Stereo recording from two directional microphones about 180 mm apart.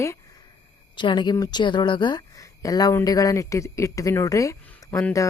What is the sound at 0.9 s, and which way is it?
A woman's voice, 25° left (ahead or behind).